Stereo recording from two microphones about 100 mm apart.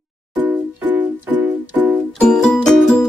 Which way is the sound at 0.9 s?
20° right (ahead or behind).